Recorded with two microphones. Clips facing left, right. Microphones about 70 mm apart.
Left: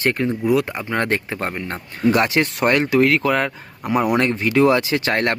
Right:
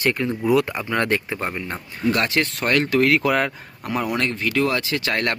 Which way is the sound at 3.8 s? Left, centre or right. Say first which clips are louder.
Left 5 dB; centre.